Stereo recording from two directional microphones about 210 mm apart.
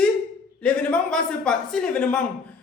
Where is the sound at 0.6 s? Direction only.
5° left (ahead or behind).